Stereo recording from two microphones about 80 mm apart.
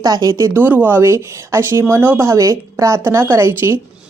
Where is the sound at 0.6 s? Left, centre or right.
Right.